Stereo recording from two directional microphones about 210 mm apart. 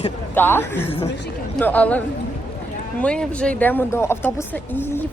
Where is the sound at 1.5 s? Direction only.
5° left (ahead or behind).